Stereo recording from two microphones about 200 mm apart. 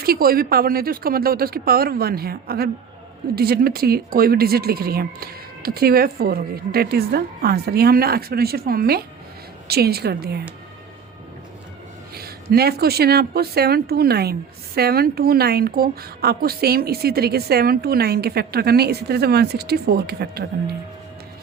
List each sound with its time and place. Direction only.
0.0 s a woman's voice: 50° right (ahead or behind)
12.1 s a woman's voice: 50° right (ahead or behind)